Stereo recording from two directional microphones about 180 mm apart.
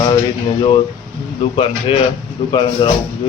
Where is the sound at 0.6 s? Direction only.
25° left (ahead or behind).